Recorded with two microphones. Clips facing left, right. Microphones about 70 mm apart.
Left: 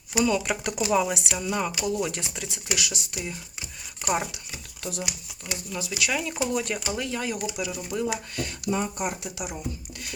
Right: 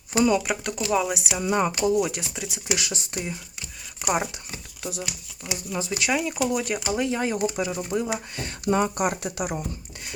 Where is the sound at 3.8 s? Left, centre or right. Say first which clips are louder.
Right 1 dB; centre.